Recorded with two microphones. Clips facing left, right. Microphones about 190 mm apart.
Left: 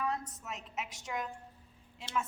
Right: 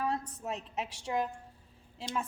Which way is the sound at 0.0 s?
30° right (ahead or behind).